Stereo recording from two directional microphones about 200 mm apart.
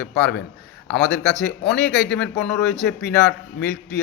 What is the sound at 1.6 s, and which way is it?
A man's voice, 5° left (ahead or behind).